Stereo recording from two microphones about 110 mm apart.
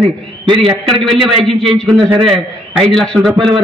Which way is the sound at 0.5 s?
50° right (ahead or behind).